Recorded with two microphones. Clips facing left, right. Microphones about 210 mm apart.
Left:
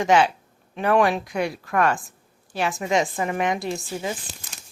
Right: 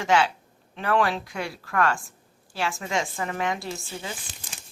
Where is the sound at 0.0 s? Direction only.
15° left (ahead or behind).